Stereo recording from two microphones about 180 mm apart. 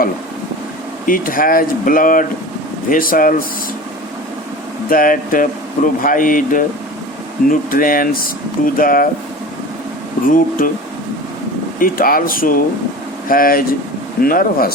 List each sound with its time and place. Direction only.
1.0 s speech: 50° left (ahead or behind)
4.9 s speech: 50° left (ahead or behind)
10.2 s speech: 50° left (ahead or behind)
11.8 s speech: 50° left (ahead or behind)